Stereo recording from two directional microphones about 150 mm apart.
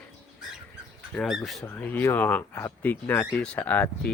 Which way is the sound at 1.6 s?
15° left (ahead or behind).